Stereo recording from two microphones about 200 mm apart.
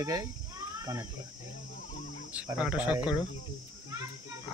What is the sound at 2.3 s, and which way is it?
Speech, 5° right (ahead or behind).